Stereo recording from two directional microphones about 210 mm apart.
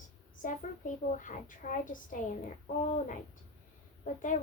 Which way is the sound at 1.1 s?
40° left (ahead or behind).